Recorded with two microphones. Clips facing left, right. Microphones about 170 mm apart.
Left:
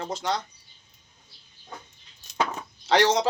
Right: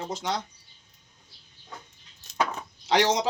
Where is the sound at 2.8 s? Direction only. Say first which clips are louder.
Left 2 dB; 15° right (ahead or behind).